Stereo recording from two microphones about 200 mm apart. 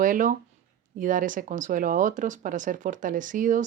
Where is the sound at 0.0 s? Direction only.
40° right (ahead or behind).